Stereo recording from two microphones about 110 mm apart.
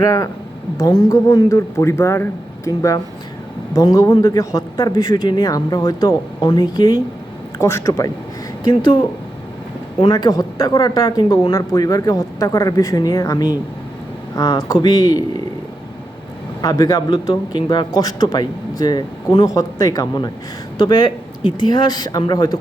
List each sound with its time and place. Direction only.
0.0 s a man's voice: 30° left (ahead or behind)
8.6 s a man's voice: 40° left (ahead or behind)
16.6 s a man's voice: 35° left (ahead or behind)